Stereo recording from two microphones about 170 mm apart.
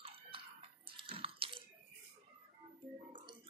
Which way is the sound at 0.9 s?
30° right (ahead or behind).